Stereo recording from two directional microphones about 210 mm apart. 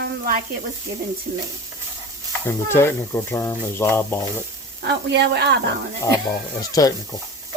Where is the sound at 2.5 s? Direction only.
10° left (ahead or behind).